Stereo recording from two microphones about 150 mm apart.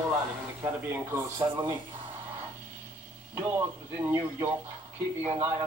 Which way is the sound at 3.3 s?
15° right (ahead or behind).